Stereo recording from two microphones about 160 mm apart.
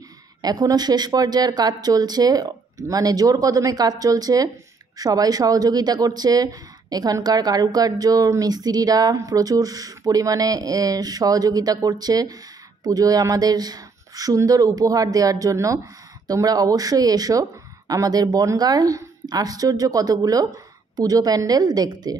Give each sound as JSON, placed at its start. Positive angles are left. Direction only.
{"t": 0.4, "sound": "speech", "side_deg": -25}